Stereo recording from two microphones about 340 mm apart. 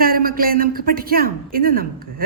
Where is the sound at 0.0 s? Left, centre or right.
Right.